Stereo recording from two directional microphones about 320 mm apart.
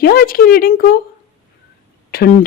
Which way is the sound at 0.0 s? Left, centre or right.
Left.